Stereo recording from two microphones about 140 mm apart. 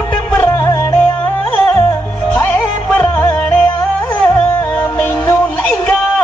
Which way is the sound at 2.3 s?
10° left (ahead or behind).